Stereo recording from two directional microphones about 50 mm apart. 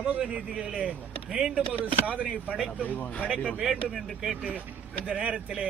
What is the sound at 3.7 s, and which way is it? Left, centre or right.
Speech, centre.